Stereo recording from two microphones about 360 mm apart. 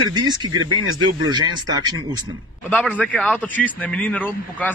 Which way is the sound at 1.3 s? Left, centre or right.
Centre.